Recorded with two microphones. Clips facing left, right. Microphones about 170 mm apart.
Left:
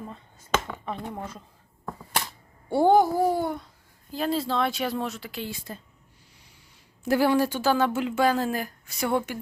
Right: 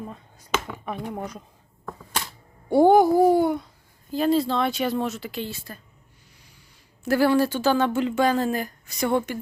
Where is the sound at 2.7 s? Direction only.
15° right (ahead or behind).